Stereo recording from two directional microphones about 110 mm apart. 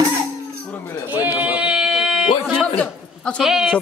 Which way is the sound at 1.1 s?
15° right (ahead or behind).